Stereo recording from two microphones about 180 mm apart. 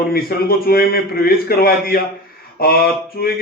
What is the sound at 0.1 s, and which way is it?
A man's voice, 55° left (ahead or behind).